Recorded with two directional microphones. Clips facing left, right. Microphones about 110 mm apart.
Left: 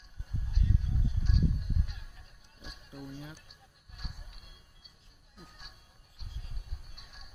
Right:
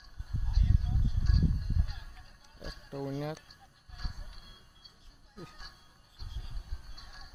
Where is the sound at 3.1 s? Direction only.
85° right.